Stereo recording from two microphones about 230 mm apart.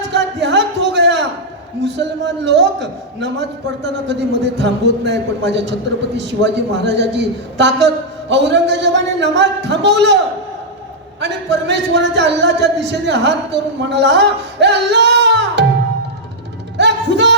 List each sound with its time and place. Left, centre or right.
0.0 s a sound: right
1.8 s speech: right
11.2 s speech: right
16.7 s music: right